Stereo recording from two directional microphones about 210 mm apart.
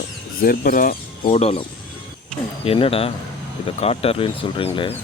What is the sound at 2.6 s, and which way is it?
Speech, 25° left (ahead or behind).